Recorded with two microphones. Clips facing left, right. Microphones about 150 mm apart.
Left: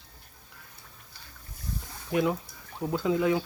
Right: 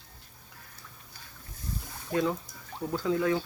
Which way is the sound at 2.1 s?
15° left (ahead or behind).